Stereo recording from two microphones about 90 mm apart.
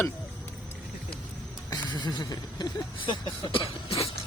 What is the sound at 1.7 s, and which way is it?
Speech, 55° left (ahead or behind).